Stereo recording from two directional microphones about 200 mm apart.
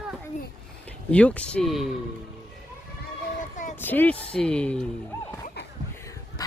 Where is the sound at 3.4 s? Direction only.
40° left (ahead or behind).